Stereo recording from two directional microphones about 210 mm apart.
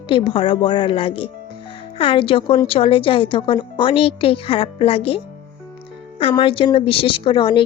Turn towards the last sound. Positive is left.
turn(degrees=20)  # may be behind; listen again after turning